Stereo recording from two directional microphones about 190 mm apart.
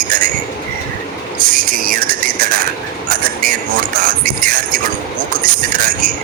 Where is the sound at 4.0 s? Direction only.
50° right (ahead or behind).